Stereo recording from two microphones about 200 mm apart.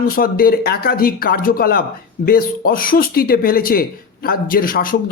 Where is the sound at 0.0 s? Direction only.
45° left (ahead or behind).